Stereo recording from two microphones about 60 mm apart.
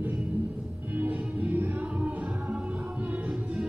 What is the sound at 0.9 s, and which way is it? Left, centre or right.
Music, right.